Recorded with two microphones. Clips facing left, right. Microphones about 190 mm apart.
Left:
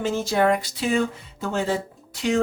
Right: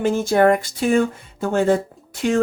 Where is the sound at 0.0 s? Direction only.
55° right (ahead or behind).